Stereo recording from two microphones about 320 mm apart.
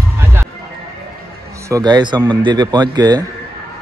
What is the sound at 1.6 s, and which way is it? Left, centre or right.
A man's voice, centre.